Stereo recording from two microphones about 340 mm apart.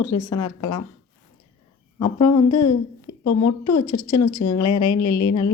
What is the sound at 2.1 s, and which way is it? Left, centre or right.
Speech, left.